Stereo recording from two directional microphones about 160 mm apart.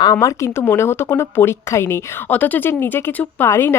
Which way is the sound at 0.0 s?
20° left (ahead or behind).